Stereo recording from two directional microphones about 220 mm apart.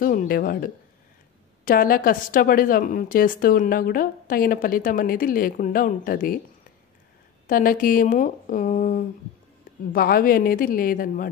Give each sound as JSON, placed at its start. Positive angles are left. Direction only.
{"t": 0.0, "sound": "a woman's voice", "side_deg": 40}
{"t": 7.4, "sound": "a woman's voice", "side_deg": 40}